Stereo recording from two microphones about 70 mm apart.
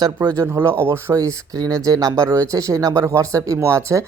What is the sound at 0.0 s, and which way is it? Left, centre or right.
Speech, right.